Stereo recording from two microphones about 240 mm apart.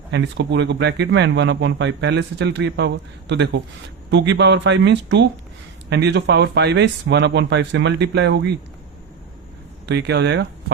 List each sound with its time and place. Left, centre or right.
0.1 s speech: right
9.8 s speech: right